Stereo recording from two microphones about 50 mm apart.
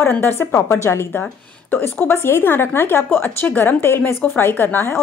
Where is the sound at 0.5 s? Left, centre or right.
Left.